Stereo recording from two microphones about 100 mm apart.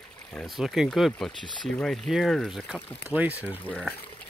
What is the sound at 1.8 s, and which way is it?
Speech, centre (ahead or behind).